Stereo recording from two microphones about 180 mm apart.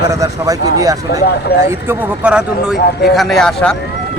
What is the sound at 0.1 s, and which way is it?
Speech, 20° right (ahead or behind).